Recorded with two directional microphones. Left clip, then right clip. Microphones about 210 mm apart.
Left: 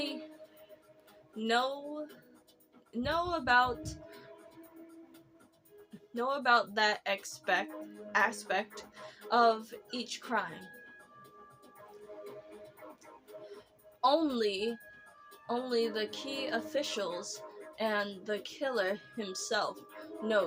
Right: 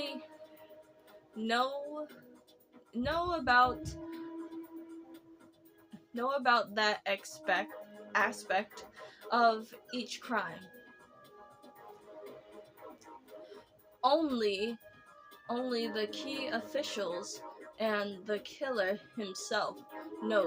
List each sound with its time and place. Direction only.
1.4 s a woman's voice: 5° left (ahead or behind)
6.1 s a woman's voice: 5° left (ahead or behind)
14.0 s a woman's voice: 5° left (ahead or behind)